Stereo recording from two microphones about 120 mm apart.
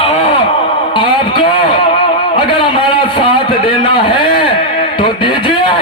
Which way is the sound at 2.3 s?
45° left (ahead or behind).